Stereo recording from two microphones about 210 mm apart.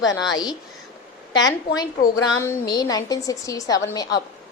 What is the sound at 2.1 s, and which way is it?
A woman's voice, 15° left (ahead or behind).